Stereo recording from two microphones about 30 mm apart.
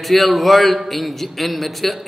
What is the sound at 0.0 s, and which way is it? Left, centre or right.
A man's voice, centre.